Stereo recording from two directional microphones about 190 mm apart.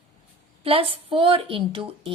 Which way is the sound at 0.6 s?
30° right (ahead or behind).